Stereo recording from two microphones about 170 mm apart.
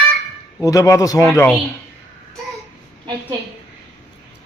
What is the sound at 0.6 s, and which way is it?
Speech, 20° left (ahead or behind).